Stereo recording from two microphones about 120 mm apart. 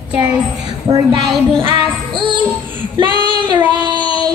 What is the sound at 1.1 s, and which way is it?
Music, 45° right (ahead or behind).